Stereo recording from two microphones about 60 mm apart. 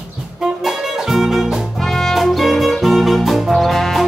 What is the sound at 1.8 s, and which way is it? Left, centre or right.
Music, centre.